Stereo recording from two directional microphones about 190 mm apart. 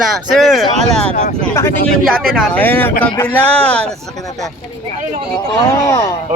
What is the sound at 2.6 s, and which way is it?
Speech, 10° left (ahead or behind).